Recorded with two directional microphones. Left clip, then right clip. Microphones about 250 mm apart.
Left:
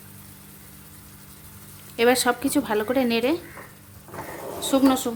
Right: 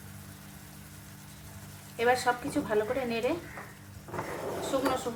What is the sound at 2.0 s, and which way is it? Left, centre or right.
A woman's voice, left.